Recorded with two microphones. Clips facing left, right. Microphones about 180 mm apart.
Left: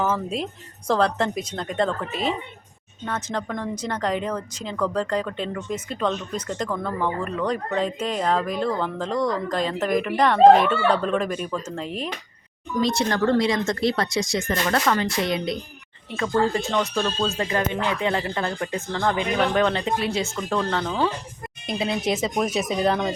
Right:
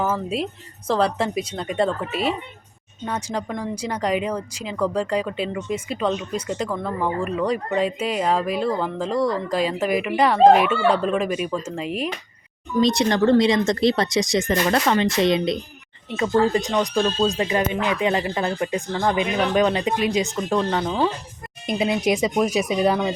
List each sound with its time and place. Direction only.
0.0 s speech: 5° right (ahead or behind)
12.8 s speech: 20° right (ahead or behind)